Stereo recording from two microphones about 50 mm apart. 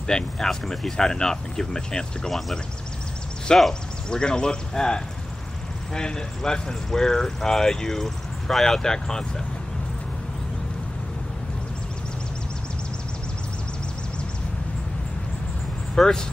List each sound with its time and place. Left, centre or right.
0.0 s speech: centre
15.9 s speech: centre